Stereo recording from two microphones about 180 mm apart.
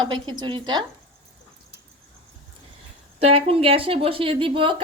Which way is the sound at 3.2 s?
35° right (ahead or behind).